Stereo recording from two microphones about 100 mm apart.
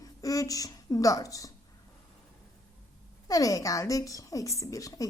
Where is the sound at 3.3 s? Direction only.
35° left (ahead or behind).